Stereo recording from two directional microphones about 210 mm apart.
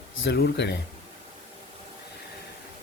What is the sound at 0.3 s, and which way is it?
Speech, 50° left (ahead or behind).